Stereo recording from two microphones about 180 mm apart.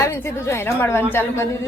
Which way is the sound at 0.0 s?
15° left (ahead or behind).